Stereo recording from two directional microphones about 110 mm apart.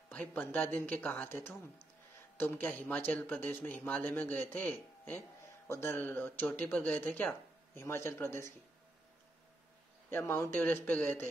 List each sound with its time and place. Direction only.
0.1 s a man's voice: 15° left (ahead or behind)
10.0 s a man's voice: 20° left (ahead or behind)